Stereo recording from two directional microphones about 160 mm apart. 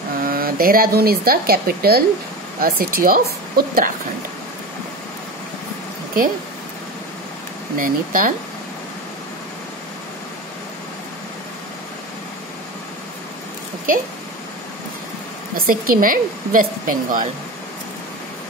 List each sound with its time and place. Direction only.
0.2 s speech: 65° right (ahead or behind)
7.7 s a woman's voice: 60° right (ahead or behind)
15.5 s a woman's voice: 65° right (ahead or behind)